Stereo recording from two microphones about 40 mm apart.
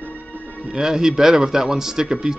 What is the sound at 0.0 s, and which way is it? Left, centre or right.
Music, left.